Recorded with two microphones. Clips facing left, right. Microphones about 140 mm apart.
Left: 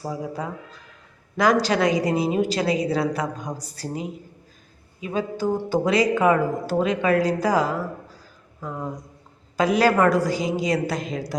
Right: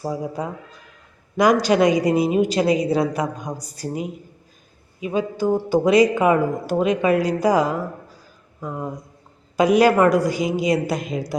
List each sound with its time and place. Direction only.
0.0 s speech: 15° right (ahead or behind)
1.6 s speech: 15° right (ahead or behind)